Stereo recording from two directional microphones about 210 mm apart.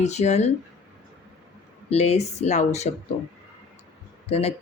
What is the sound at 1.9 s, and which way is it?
Speech, 30° left (ahead or behind).